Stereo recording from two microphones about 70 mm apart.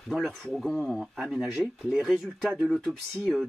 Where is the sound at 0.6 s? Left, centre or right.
Centre.